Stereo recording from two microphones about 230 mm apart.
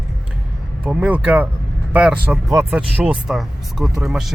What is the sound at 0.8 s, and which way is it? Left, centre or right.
Speech, centre.